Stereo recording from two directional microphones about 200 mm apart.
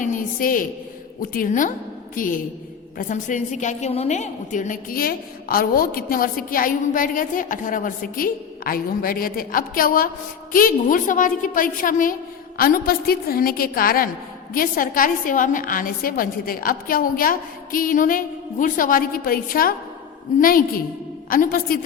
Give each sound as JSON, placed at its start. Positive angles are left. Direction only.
{"t": 0.0, "sound": "a woman's voice", "side_deg": 40}
{"t": 21.2, "sound": "a woman's voice", "side_deg": 45}